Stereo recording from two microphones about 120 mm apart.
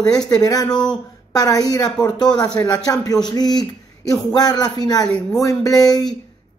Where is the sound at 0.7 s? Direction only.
5° left (ahead or behind).